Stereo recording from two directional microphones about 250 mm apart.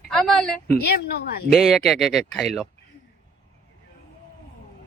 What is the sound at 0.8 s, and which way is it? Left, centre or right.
Speech, left.